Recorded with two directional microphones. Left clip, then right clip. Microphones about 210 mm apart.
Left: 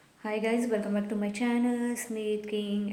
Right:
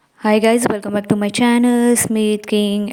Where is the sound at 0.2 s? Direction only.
50° right (ahead or behind).